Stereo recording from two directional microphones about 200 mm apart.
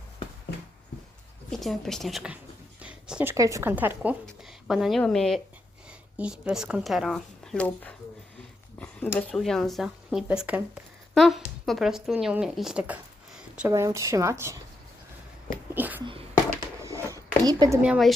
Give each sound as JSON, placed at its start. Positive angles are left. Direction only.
{"t": 1.5, "sound": "speech", "side_deg": 0}
{"t": 2.8, "sound": "a sound", "side_deg": -5}
{"t": 3.3, "sound": "a woman's voice", "side_deg": -15}
{"t": 13.6, "sound": "speech", "side_deg": -15}
{"t": 15.7, "sound": "a sound", "side_deg": -10}
{"t": 17.8, "sound": "a woman's voice", "side_deg": -5}